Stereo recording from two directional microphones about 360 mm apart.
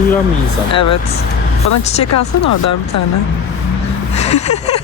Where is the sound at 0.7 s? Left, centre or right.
Left.